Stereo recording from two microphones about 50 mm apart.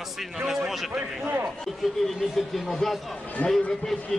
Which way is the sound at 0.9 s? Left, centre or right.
Right.